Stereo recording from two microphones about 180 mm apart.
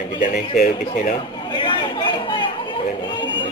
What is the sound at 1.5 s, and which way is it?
Chatter, 25° left (ahead or behind).